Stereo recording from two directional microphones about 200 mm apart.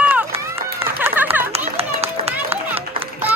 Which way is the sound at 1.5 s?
30° right (ahead or behind).